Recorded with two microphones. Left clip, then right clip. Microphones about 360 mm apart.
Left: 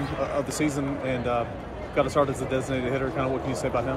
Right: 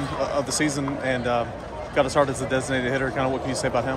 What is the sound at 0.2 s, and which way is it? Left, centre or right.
Speech, right.